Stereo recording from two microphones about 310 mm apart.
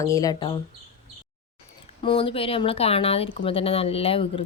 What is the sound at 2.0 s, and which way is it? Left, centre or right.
Speech, centre.